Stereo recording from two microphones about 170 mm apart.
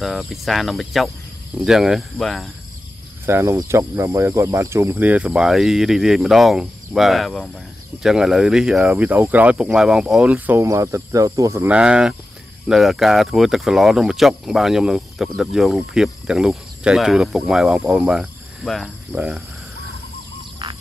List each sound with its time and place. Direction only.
0.0 s speech: centre (ahead or behind)
3.3 s speech: 15° right (ahead or behind)
20.6 s frog: 25° right (ahead or behind)